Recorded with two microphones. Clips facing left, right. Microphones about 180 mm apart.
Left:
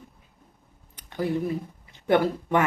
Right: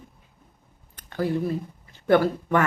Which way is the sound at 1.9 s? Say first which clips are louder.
Right 2 dB; 15° left (ahead or behind).